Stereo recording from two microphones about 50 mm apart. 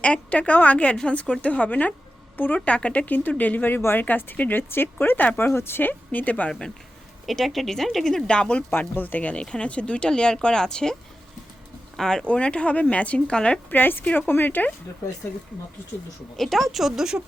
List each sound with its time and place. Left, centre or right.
0.0 s a woman's voice: left
3.8 s speech: left
4.0 s speech: left
5.4 s speech: left
5.9 s speech: left
7.3 s speech: centre
8.3 s speech: left
8.8 s speech: left
9.3 s speech: left
11.9 s speech: centre
12.3 s speech: left
13.7 s speech: left
16.4 s speech: centre